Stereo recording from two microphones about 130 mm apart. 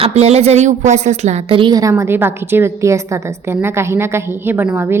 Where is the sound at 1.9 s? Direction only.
15° right (ahead or behind).